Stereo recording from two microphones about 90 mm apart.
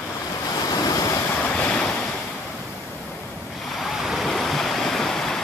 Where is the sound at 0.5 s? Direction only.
45° left (ahead or behind).